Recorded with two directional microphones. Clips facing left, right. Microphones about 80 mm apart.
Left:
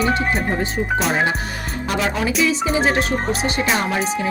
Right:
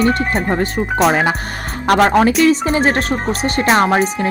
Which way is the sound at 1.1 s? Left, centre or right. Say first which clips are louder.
Right 4 dB; right.